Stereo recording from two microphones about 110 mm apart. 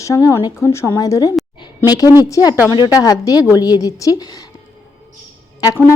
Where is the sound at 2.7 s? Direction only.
40° left (ahead or behind).